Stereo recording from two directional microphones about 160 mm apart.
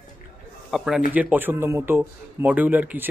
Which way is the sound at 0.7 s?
Centre (ahead or behind).